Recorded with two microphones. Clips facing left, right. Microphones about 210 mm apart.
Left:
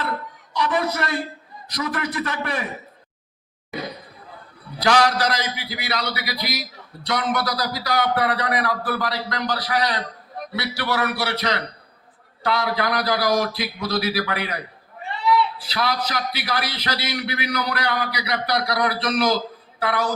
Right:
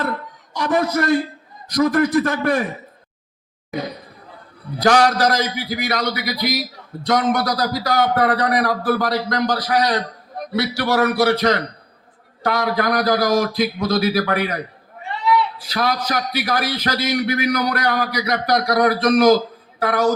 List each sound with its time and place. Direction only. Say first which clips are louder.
0.5 s a man's voice: right 4 dB; 45° right (ahead or behind)
4.8 s a man's voice: right 4 dB; 45° right (ahead or behind)
15.6 s a man's voice: right 3 dB; 45° right (ahead or behind)